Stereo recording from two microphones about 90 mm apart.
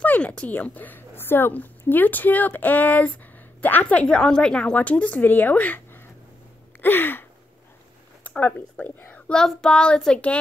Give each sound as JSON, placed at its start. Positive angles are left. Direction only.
{"t": 0.0, "sound": "a woman's voice", "side_deg": 15}
{"t": 6.8, "sound": "a sound", "side_deg": 25}
{"t": 8.2, "sound": "speech", "side_deg": 20}
{"t": 9.3, "sound": "a woman's voice", "side_deg": 5}